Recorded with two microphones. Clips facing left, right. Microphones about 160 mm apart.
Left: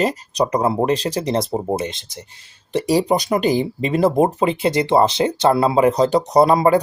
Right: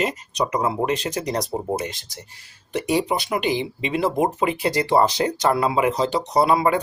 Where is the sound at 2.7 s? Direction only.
35° left (ahead or behind).